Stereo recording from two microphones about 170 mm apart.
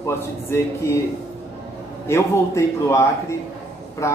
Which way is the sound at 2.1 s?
15° left (ahead or behind).